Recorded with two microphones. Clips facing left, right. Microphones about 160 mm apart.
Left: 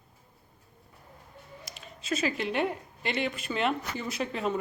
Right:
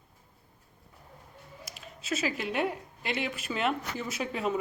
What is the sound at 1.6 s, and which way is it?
Speech, 5° right (ahead or behind).